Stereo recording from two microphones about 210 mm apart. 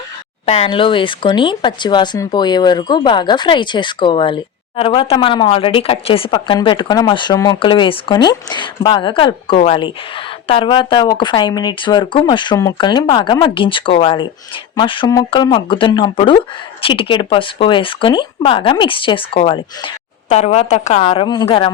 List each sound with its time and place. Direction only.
0.4 s speech: 30° left (ahead or behind)